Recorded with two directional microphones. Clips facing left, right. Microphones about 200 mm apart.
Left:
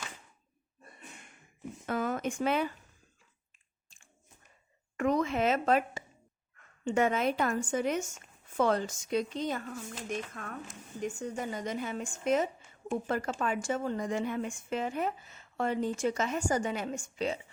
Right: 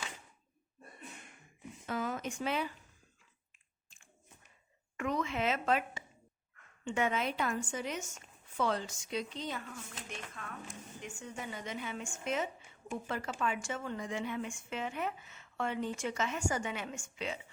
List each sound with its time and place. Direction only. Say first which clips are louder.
1.9 s speech: left 5 dB; 50° left (ahead or behind)
4.9 s speech: left 6 dB; 40° left (ahead or behind)